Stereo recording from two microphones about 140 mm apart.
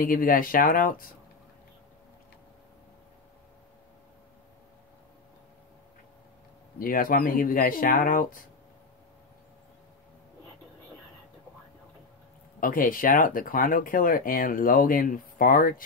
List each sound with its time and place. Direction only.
0.0 s speech: 80° left
6.8 s speech: 85° left
12.5 s speech: 85° left